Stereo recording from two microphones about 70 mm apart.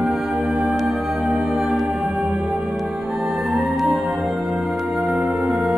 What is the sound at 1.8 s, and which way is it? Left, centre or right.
Music, centre.